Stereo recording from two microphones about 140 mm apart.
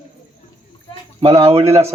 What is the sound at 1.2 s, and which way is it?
Speech, 45° right (ahead or behind).